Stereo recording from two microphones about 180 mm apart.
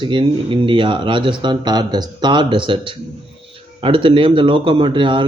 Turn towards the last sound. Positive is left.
turn(degrees=-25)  # may be behind; listen again after turning